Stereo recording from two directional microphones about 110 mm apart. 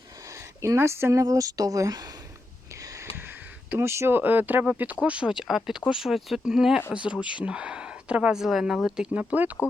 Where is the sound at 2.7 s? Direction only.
30° right (ahead or behind).